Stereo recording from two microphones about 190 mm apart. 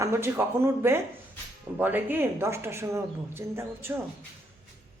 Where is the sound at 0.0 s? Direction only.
15° right (ahead or behind).